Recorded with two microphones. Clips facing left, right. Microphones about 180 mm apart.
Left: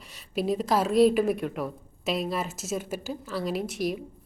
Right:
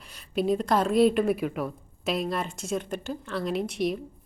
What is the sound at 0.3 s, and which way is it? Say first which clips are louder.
A woman's voice: right 1 dB; centre (ahead or behind).